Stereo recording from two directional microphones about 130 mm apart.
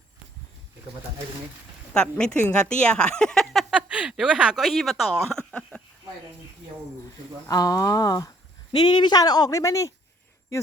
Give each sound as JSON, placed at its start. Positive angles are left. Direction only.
{"t": 1.9, "sound": "speech", "side_deg": 5}
{"t": 7.5, "sound": "speech", "side_deg": 30}